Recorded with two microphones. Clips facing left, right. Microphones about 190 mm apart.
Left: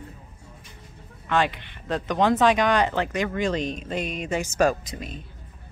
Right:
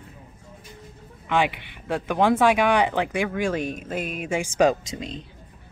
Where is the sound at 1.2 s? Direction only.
15° right (ahead or behind).